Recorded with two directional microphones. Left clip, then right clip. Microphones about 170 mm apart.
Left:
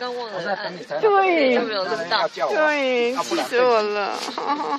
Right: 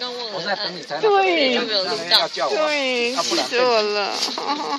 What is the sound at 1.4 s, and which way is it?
Speech, 25° left (ahead or behind).